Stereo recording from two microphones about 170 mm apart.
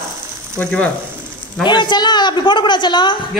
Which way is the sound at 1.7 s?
25° left (ahead or behind).